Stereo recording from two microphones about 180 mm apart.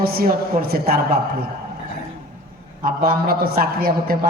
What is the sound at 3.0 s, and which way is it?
A man's voice, 55° right (ahead or behind).